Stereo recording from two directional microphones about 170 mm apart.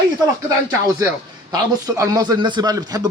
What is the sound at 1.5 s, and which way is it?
A man's voice, 20° right (ahead or behind).